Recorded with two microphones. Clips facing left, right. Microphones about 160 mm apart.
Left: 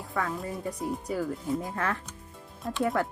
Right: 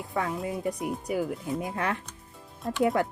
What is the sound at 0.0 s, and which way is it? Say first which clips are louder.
Music: right 1 dB; 20° right (ahead or behind).